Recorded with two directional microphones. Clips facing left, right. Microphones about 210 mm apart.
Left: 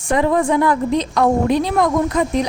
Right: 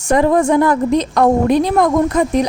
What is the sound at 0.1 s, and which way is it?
A woman's voice, 45° right (ahead or behind).